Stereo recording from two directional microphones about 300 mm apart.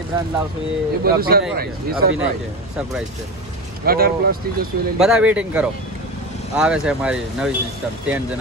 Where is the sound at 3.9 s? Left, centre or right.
Right.